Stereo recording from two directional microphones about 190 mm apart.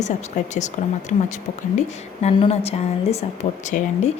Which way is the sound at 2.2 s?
35° left (ahead or behind).